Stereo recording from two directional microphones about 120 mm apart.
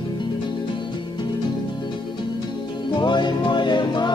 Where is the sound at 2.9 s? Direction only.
40° left (ahead or behind).